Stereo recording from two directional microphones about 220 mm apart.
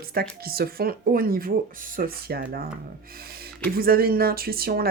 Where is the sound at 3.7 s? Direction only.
40° right (ahead or behind).